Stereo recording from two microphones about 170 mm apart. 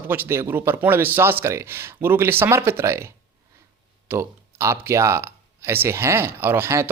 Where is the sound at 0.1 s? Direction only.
15° right (ahead or behind).